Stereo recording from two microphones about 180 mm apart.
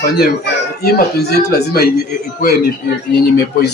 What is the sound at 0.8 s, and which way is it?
Speech, 60° left (ahead or behind).